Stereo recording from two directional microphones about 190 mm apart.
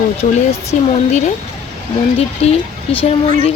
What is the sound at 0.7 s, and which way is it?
A woman's voice, 40° left (ahead or behind).